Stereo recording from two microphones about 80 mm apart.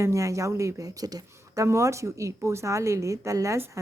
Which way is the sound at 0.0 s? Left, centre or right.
Right.